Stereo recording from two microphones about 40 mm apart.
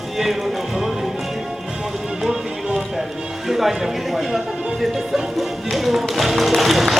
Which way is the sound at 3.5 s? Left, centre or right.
Centre.